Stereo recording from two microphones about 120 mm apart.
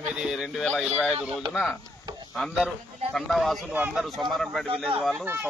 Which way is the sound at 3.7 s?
10° right (ahead or behind).